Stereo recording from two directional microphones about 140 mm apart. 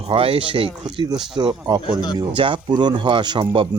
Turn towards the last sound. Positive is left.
turn(degrees=-35)  # may be behind; listen again after turning